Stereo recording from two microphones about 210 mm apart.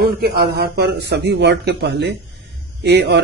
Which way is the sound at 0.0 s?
45° right (ahead or behind).